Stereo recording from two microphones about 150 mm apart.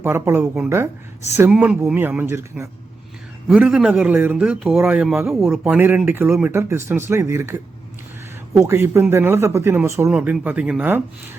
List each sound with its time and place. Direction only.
0.0 s a man's voice: 15° right (ahead or behind)